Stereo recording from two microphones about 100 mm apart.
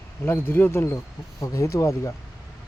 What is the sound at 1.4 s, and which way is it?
Speech, 35° left (ahead or behind).